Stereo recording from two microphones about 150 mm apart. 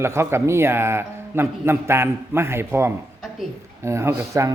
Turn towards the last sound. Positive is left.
turn(degrees=-20)  # may be behind; listen again after turning